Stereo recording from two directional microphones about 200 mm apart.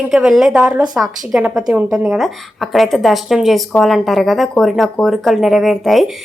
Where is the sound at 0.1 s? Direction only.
5° right (ahead or behind).